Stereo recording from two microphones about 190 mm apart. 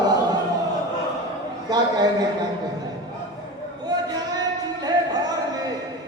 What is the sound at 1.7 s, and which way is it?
Speech, 20° right (ahead or behind).